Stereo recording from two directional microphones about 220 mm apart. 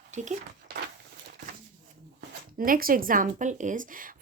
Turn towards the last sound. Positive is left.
turn(degrees=-40)  # may be behind; listen again after turning